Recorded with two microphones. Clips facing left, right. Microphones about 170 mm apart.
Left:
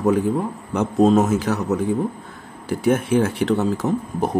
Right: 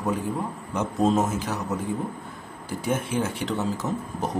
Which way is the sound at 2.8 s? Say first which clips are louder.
Left 8 dB; 60° left (ahead or behind).